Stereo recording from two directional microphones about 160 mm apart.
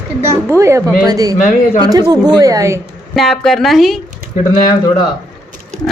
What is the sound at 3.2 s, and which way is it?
Speech, centre (ahead or behind).